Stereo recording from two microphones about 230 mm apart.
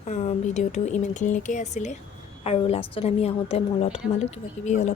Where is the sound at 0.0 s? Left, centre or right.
Left.